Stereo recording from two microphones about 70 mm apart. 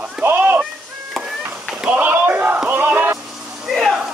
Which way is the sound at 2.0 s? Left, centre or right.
Right.